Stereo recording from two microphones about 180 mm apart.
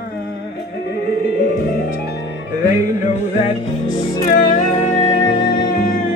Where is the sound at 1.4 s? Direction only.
65° left (ahead or behind).